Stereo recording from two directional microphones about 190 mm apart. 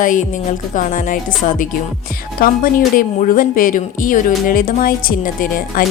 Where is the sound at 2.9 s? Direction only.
45° left (ahead or behind).